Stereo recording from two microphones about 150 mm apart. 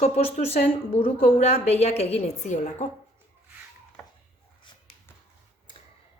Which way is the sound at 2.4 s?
55° left (ahead or behind).